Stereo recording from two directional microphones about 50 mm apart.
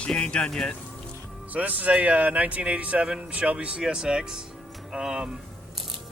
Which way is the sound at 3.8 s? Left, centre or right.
Centre.